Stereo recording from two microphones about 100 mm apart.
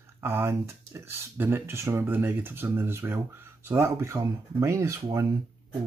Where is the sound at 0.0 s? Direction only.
25° right (ahead or behind).